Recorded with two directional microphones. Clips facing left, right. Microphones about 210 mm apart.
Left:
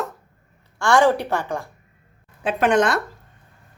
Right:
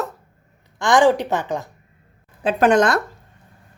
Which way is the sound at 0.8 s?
15° right (ahead or behind).